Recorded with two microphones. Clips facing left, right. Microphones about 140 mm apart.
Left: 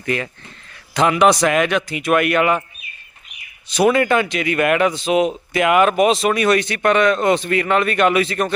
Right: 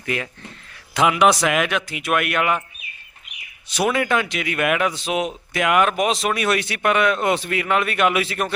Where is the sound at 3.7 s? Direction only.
Centre (ahead or behind).